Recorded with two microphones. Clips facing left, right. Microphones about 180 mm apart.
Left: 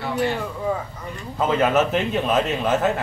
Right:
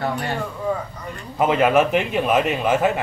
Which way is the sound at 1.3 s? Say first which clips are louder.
Right 2 dB; 15° right (ahead or behind).